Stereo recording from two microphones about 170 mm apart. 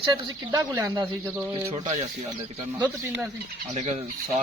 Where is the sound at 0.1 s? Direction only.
20° right (ahead or behind).